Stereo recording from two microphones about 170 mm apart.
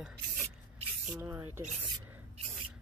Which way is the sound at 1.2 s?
15° right (ahead or behind).